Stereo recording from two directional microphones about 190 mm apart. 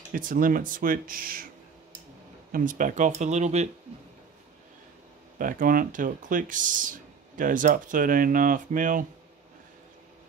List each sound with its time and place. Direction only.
0.1 s speech: 45° right (ahead or behind)
2.5 s speech: 45° right (ahead or behind)
5.4 s speech: 45° right (ahead or behind)